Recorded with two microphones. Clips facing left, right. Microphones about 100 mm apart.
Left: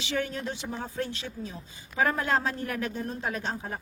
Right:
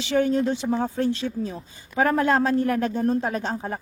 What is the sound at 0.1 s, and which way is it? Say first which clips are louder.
Speech: right 10 dB; 30° right (ahead or behind).